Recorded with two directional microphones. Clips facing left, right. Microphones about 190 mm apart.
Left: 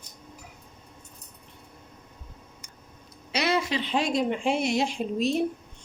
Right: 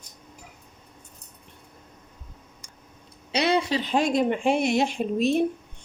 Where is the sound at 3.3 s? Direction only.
30° right (ahead or behind).